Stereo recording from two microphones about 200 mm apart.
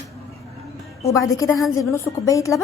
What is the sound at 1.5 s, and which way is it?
Speech, centre (ahead or behind).